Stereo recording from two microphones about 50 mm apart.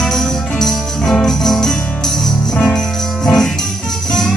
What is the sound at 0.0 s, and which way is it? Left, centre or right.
Jingle bell, centre.